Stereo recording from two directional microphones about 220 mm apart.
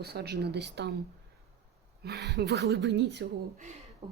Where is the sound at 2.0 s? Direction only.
50° right (ahead or behind).